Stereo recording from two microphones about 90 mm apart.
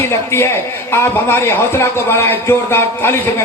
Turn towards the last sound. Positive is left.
turn(degrees=25)  # may be behind; listen again after turning